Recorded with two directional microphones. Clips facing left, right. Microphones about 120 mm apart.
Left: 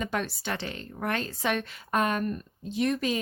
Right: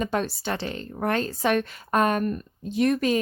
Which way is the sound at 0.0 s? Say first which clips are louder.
Right 5 dB; 35° right (ahead or behind).